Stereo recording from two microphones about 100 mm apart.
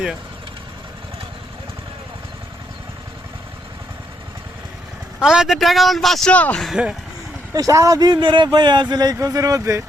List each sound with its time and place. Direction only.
5.2 s speech: 5° right (ahead or behind)
6.3 s speech: 15° left (ahead or behind)
6.8 s speech: 10° right (ahead or behind)
7.5 s speech: 35° right (ahead or behind)